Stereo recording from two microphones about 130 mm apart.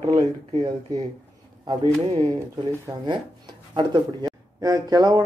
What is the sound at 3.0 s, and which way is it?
Speech, 35° right (ahead or behind).